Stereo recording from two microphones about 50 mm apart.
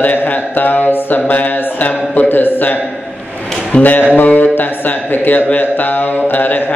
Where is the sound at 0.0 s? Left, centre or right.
Left.